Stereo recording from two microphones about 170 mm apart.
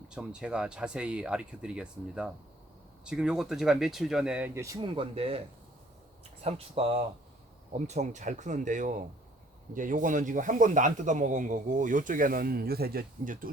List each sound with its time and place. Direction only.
0.1 s speech: 5° right (ahead or behind); by 5.4 s 35° right (ahead or behind)
6.4 s speech: 35° right (ahead or behind); by 13.5 s 55° right (ahead or behind)